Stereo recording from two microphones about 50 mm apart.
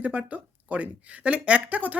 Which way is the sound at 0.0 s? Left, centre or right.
Right.